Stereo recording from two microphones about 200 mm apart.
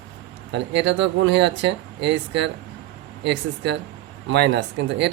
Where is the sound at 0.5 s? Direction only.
60° right (ahead or behind).